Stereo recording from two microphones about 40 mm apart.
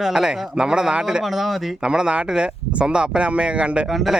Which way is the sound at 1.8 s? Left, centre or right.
Right.